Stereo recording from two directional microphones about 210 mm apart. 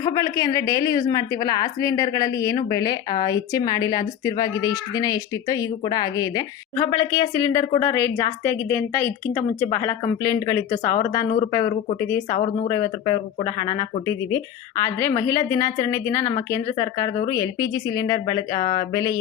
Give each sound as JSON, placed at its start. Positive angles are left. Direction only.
{"t": 0.0, "sound": "a woman's voice", "side_deg": 15}